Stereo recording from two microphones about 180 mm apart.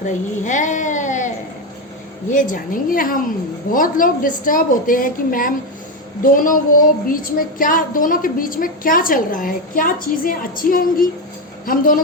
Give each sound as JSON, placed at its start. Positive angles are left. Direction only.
{"t": 0.0, "sound": "speech", "side_deg": 45}
{"t": 2.3, "sound": "a woman's voice", "side_deg": 45}